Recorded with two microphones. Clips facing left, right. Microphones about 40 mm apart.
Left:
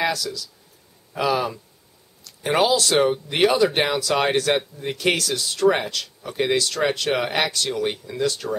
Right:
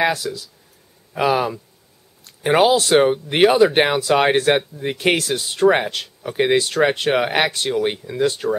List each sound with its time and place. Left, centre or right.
0.0 s speech: right